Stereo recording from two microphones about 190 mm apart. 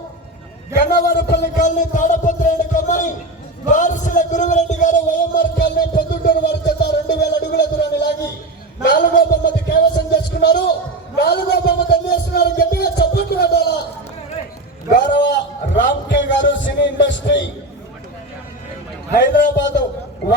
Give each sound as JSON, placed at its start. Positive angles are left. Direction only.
{"t": 0.9, "sound": "a man's voice", "side_deg": 55}
{"t": 11.1, "sound": "a sound", "side_deg": 60}
{"t": 14.8, "sound": "speech", "side_deg": 50}
{"t": 15.8, "sound": "a man's voice", "side_deg": 65}
{"t": 19.1, "sound": "speech", "side_deg": 55}